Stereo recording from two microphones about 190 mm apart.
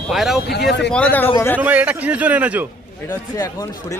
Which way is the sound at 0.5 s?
60° left (ahead or behind).